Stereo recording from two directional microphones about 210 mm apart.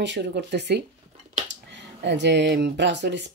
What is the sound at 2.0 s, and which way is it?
Speech, 55° right (ahead or behind).